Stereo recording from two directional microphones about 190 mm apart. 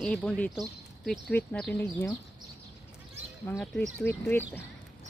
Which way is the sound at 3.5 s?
10° left (ahead or behind).